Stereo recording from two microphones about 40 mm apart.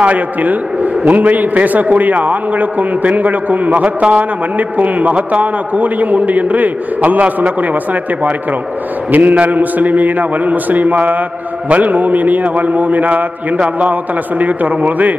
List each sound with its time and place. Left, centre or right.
0.0 s a man's voice: right
14.4 s a man's voice: right